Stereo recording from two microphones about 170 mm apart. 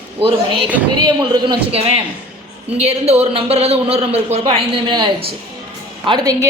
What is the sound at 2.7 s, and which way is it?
A man's voice, 40° right (ahead or behind).